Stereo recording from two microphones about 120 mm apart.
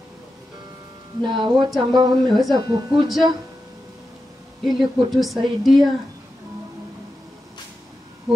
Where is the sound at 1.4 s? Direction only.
40° right (ahead or behind).